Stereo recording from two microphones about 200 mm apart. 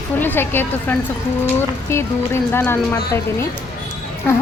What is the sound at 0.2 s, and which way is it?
A woman's voice, 10° left (ahead or behind).